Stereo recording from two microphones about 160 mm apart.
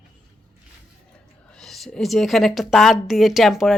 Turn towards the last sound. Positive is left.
turn(degrees=0)  # may be behind; listen again after turning